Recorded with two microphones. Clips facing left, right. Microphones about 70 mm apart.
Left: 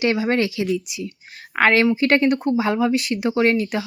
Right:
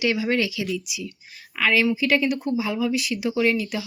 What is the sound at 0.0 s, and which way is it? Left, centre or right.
Speech, left.